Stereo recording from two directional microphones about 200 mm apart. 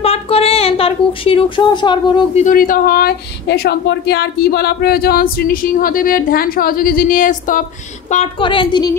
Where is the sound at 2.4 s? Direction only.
45° left (ahead or behind).